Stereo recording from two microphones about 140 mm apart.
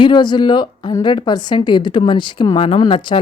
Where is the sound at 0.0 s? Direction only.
30° left (ahead or behind).